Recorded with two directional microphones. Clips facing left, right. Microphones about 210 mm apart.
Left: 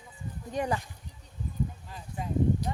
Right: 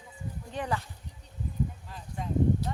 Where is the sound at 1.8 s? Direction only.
5° left (ahead or behind).